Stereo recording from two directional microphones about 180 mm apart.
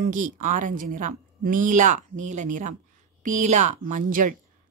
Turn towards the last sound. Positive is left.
turn(degrees=-45)  # may be behind; listen again after turning